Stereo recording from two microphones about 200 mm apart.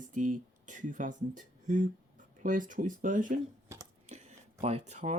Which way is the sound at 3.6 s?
15° right (ahead or behind).